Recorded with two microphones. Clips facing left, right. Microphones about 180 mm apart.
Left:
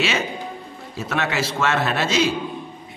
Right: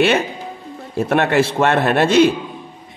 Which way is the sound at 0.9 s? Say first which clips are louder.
Right 9 dB; 60° right (ahead or behind).